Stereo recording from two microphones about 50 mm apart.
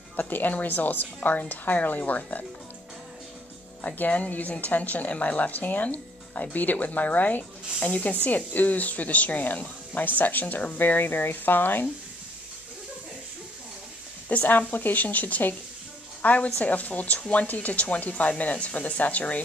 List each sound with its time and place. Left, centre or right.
0.1 s a woman's voice: left
3.8 s a woman's voice: left
14.3 s a woman's voice: left